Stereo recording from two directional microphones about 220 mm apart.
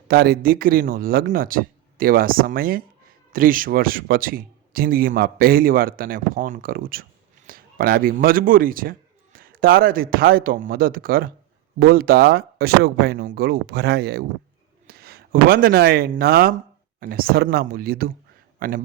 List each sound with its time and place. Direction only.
0.1 s speech: 40° right (ahead or behind)